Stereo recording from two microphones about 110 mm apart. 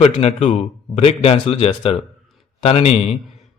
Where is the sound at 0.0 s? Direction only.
85° left.